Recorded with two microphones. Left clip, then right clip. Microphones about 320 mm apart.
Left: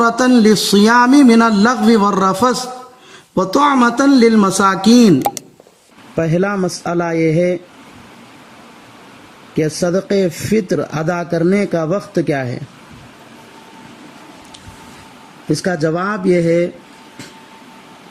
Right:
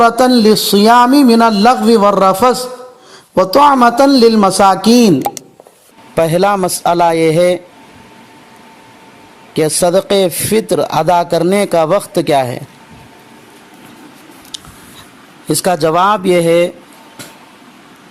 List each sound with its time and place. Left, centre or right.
0.0 s a man's voice: centre
6.1 s speech: right
9.6 s speech: right
15.4 s speech: right